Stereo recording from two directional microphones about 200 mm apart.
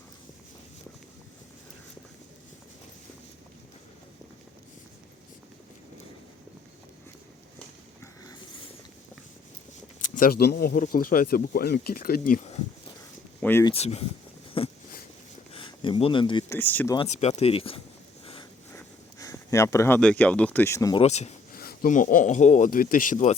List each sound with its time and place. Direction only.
8.0 s a sound: 15° left (ahead or behind)
10.2 s speech: 50° left (ahead or behind)
13.4 s speech: 10° left (ahead or behind)
13.7 s speech: 30° left (ahead or behind)
14.6 s a sound: 30° left (ahead or behind)
15.5 s speech: 25° left (ahead or behind)
16.5 s speech: 10° left (ahead or behind)
17.0 s speech: 30° left (ahead or behind)
18.7 s speech: 15° left (ahead or behind)
21.0 s speech: 35° left (ahead or behind)
21.6 s speech: 50° left (ahead or behind)